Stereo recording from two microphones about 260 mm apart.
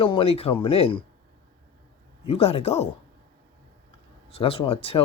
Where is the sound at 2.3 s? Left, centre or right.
Left.